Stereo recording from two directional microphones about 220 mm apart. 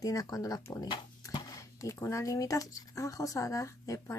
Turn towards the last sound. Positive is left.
turn(degrees=15)  # may be behind; listen again after turning